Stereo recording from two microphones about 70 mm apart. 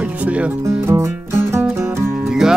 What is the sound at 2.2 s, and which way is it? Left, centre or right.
Music, centre.